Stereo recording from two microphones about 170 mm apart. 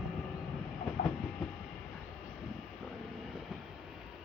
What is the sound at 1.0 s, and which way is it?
Train, 45° left (ahead or behind).